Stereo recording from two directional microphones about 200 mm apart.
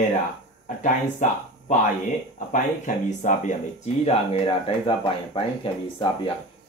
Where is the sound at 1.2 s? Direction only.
40° left (ahead or behind).